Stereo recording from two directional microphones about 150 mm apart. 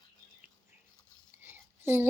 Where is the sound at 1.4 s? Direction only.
15° right (ahead or behind).